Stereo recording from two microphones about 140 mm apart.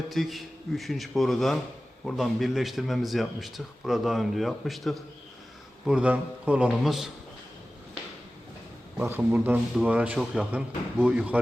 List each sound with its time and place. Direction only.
0.1 s speech: centre (ahead or behind)
9.0 s speech: 15° right (ahead or behind)